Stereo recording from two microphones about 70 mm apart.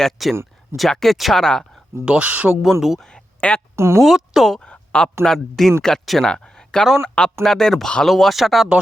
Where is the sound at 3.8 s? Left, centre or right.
Right.